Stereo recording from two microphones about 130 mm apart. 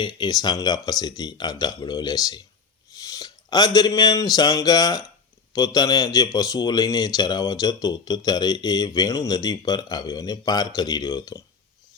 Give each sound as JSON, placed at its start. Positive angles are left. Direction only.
{"t": 0.0, "sound": "a man's voice", "side_deg": 35}